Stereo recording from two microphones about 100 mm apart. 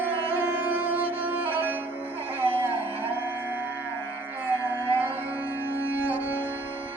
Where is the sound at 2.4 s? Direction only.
20° right (ahead or behind).